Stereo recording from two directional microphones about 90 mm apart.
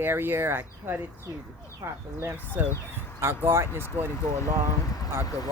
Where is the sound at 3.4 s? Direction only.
30° right (ahead or behind).